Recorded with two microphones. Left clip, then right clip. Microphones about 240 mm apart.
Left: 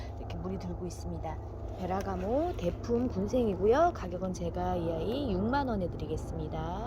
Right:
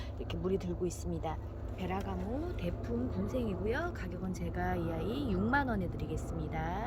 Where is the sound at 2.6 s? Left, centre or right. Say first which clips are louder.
Left 7 dB; left.